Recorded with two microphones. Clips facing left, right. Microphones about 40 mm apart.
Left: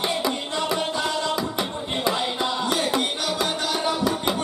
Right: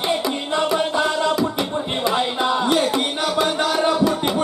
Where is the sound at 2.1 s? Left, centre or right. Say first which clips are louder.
Right 5 dB; centre.